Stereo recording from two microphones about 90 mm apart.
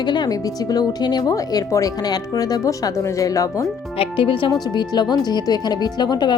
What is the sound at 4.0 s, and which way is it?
Speech, 75° left (ahead or behind).